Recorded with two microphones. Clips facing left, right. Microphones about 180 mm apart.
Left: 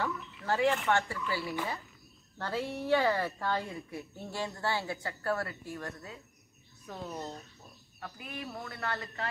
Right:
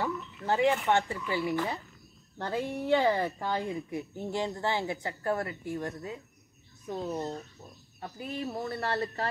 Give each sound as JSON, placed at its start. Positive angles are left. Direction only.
{"t": 0.0, "sound": "speech", "side_deg": -15}